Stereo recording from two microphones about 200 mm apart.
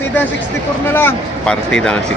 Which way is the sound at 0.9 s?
5° left (ahead or behind).